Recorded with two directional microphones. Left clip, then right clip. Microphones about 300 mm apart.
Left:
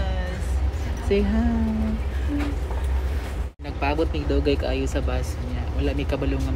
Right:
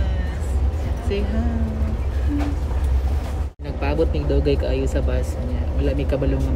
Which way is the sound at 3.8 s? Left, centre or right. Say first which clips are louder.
Right 2 dB; centre.